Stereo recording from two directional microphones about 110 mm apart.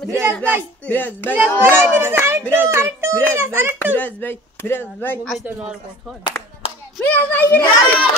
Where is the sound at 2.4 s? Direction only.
10° left (ahead or behind).